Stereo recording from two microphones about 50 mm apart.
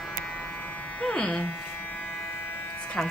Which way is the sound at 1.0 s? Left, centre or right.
Centre.